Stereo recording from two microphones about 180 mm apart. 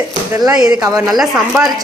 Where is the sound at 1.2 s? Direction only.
Centre (ahead or behind).